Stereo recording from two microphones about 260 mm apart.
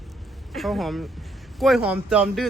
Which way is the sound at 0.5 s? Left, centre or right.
Centre.